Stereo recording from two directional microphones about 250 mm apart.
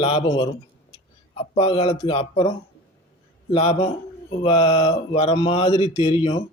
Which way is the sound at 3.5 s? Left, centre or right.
Left.